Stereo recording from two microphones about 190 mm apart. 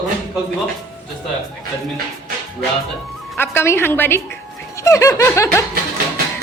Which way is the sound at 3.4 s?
10° left (ahead or behind).